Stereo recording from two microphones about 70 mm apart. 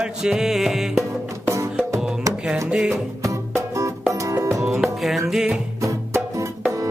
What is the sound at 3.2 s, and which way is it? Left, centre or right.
Music, right.